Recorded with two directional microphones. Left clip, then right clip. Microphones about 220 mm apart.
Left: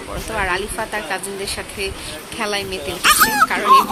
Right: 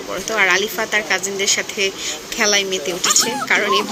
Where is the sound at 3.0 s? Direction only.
10° left (ahead or behind).